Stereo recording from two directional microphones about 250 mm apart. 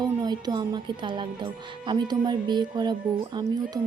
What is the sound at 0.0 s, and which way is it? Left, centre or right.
Speech, centre.